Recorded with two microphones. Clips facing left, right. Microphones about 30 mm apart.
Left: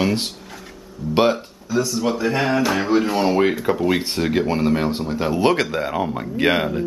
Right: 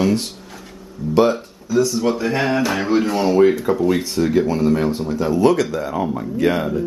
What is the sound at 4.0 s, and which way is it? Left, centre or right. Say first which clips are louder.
Speech: right 3 dB; left.